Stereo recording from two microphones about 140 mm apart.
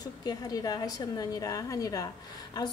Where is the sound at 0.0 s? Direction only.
30° left (ahead or behind).